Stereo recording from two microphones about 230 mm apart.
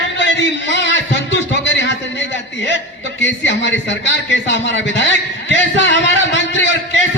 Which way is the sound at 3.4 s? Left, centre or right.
Left.